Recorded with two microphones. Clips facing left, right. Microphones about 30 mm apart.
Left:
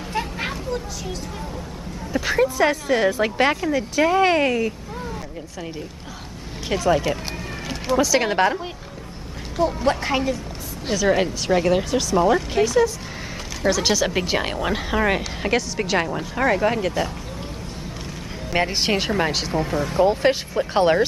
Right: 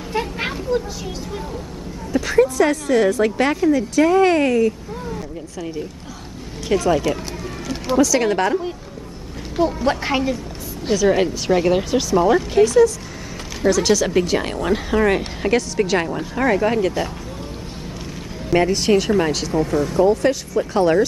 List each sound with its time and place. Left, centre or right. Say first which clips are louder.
0.4 s a sound: right 5 dB; centre
2.1 s speech: right 4 dB; centre
6.7 s speech: right 2 dB; centre
9.8 s speech: right 1 dB; centre
18.7 s speech: right 5 dB; left
19.1 s speech: right 3 dB; centre
20.1 s speech: right 2 dB; left